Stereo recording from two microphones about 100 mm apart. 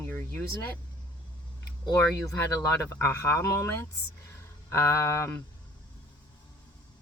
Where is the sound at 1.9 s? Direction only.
35° left (ahead or behind).